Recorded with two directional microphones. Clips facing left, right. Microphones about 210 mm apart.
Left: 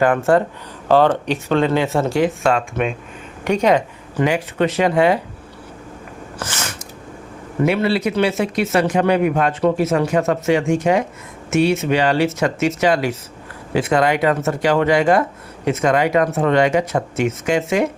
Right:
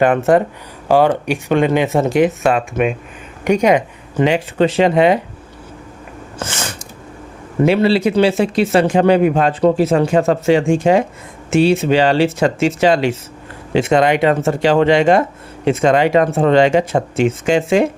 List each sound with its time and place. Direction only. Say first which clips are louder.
0.0 s speech: right 3 dB; 20° right (ahead or behind)
6.4 s a sound: right 3 dB; 30° right (ahead or behind)
7.6 s speech: right 4 dB; 30° right (ahead or behind)